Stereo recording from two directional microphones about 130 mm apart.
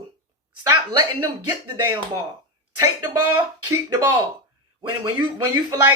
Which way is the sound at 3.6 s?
20° right (ahead or behind).